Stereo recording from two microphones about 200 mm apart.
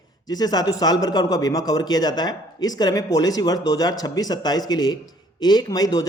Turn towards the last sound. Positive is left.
turn(degrees=20)  # may be behind; listen again after turning